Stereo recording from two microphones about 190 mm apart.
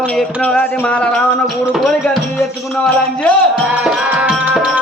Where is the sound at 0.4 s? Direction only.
10° left (ahead or behind).